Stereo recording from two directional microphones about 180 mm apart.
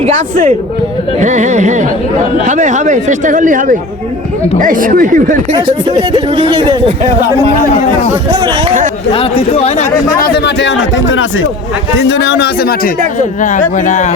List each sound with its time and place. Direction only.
0.0 s speech: 45° right (ahead or behind)
5.5 s speech: 25° right (ahead or behind)
8.3 s speech: 25° right (ahead or behind)
9.1 s speech: 30° left (ahead or behind)
10.2 s speech: 55° left (ahead or behind); by 11.4 s 90° left
11.9 s a man's voice: 80° left; by 12.9 s 55° left (ahead or behind)
13.1 s speech: 45° left (ahead or behind)